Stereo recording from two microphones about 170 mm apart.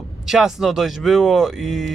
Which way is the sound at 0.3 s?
5° right (ahead or behind).